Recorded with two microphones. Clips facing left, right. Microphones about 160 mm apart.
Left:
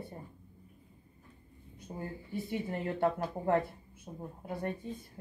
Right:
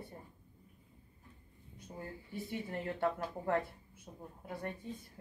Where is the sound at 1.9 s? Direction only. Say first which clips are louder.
Left 5 dB; 25° left (ahead or behind).